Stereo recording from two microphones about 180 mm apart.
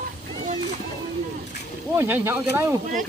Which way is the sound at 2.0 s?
15° right (ahead or behind).